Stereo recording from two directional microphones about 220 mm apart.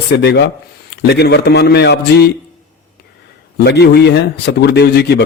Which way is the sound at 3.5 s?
50° left (ahead or behind).